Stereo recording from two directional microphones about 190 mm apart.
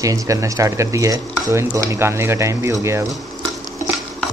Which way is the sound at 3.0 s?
Centre (ahead or behind).